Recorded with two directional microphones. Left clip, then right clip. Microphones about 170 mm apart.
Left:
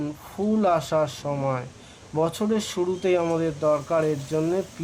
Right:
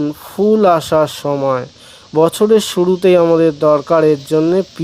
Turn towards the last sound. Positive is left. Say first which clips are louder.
# right 12 dB
turn(degrees=-60)  # may be behind; listen again after turning